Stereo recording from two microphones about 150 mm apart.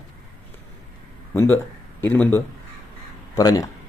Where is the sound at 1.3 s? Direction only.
15° left (ahead or behind).